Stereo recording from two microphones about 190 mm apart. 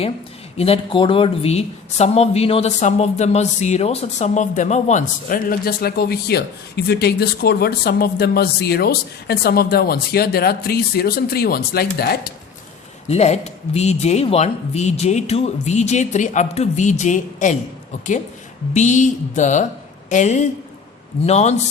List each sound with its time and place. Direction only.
0.5 s a woman's voice: 30° left (ahead or behind); by 12.3 s 55° left (ahead or behind)
13.1 s speech: 35° left (ahead or behind)
18.7 s a woman's voice: 40° left (ahead or behind)